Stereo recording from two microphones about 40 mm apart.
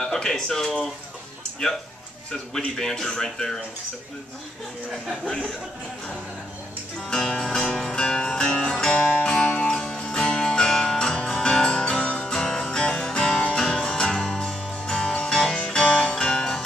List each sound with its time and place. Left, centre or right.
0.0 s speech: centre
2.5 s speech: centre
5.2 s speech: left
7.0 s speech: centre
8.0 s music: centre